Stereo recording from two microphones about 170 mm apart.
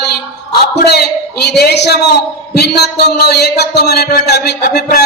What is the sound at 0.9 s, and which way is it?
A man's voice, 75° left (ahead or behind).